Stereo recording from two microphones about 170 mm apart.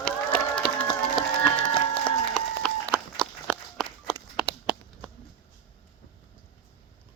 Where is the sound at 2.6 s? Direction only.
5° left (ahead or behind).